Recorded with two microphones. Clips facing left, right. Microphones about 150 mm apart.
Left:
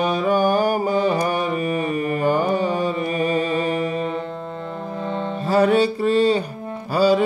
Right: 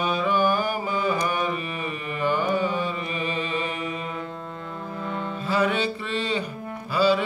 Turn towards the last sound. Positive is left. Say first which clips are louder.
# left 4 dB
turn(degrees=40)  # may be behind; listen again after turning